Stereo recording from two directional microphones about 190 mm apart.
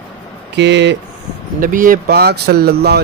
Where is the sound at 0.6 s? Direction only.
65° right (ahead or behind).